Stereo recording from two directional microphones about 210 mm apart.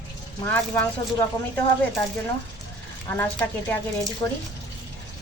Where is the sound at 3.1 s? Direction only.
10° left (ahead or behind).